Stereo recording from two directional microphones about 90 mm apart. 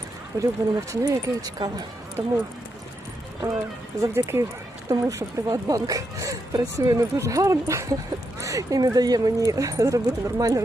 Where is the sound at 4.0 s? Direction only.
35° right (ahead or behind).